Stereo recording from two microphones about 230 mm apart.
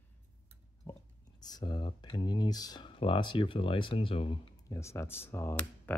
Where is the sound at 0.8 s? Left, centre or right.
Centre.